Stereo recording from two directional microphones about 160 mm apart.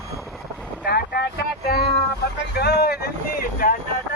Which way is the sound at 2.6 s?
90° left.